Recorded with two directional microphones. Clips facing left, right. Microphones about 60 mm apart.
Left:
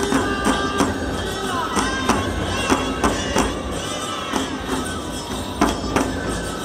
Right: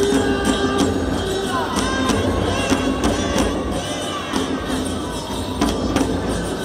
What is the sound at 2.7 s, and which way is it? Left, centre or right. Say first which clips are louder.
Music: left 2 dB; left.